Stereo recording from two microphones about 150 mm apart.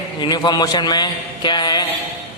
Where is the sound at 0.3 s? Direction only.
25° left (ahead or behind).